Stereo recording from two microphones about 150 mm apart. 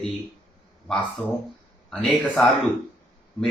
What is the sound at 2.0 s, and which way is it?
Speech, centre (ahead or behind).